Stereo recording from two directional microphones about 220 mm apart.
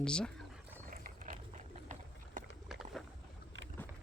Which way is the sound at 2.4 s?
35° right (ahead or behind).